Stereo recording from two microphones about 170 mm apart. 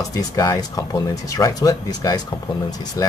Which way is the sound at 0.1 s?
20° left (ahead or behind).